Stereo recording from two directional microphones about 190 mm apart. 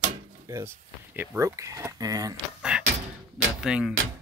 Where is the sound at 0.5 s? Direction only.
15° right (ahead or behind).